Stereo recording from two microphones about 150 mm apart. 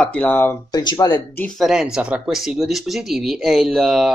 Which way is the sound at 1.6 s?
5° right (ahead or behind).